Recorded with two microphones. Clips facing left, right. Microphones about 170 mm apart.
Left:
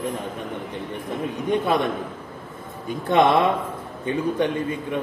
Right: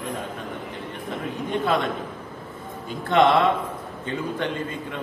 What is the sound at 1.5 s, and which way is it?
Speech, 15° left (ahead or behind).